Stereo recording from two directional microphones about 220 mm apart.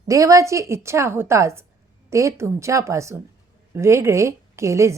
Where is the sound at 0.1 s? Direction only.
15° right (ahead or behind).